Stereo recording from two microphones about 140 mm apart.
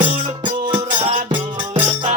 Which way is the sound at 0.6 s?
35° right (ahead or behind).